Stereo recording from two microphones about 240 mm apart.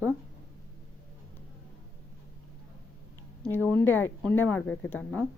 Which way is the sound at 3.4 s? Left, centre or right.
Centre.